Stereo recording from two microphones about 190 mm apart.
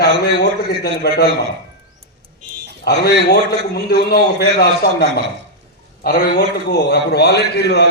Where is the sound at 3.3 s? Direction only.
55° left (ahead or behind).